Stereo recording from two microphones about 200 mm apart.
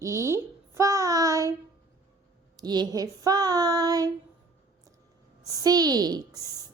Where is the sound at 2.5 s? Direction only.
20° right (ahead or behind).